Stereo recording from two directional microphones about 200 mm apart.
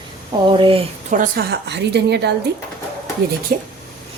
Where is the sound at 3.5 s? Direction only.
45° right (ahead or behind).